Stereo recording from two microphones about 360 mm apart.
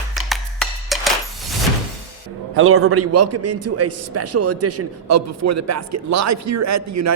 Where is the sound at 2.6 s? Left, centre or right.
Right.